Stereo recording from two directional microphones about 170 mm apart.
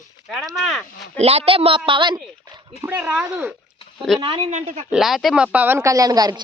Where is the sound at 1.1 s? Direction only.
35° right (ahead or behind).